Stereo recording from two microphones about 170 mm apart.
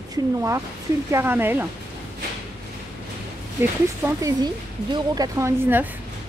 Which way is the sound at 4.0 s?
20° right (ahead or behind).